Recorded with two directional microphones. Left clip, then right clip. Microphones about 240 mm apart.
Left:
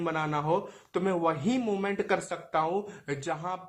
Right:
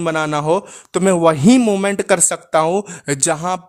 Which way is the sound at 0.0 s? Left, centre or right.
Right.